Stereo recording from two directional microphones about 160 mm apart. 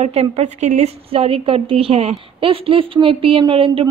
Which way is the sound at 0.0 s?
40° right (ahead or behind).